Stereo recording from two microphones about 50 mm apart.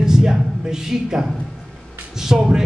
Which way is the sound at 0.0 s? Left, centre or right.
Centre.